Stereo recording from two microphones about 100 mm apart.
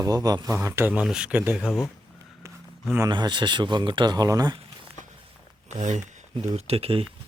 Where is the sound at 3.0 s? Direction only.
50° right (ahead or behind).